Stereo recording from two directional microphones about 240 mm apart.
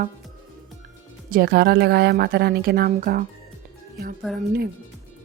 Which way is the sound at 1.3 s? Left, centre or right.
Right.